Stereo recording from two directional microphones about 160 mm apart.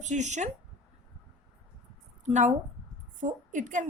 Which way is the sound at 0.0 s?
50° right (ahead or behind).